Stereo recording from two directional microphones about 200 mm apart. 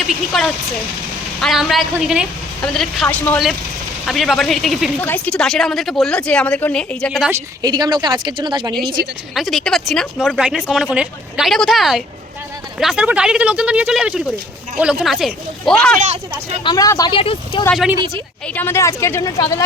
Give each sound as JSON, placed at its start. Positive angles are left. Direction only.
{"t": 0.1, "sound": "speech", "side_deg": 0}
{"t": 7.6, "sound": "speech", "side_deg": -20}
{"t": 9.3, "sound": "speech", "side_deg": 0}
{"t": 16.6, "sound": "speech", "side_deg": 15}
{"t": 17.7, "sound": "speech", "side_deg": 0}
{"t": 18.4, "sound": "a woman's voice", "side_deg": 10}